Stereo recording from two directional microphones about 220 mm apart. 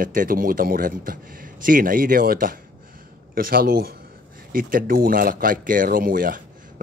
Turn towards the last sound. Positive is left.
turn(degrees=-40)  # may be behind; listen again after turning